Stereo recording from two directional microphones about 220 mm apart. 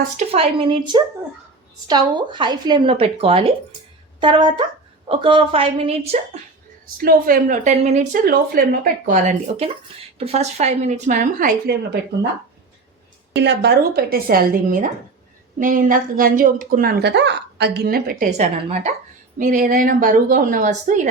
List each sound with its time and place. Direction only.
0.0 s speech: 30° right (ahead or behind)
6.9 s speech: 40° right (ahead or behind)
10.2 s speech: 30° right (ahead or behind)
13.3 s a woman's voice: 50° right (ahead or behind); by 21.1 s 35° right (ahead or behind)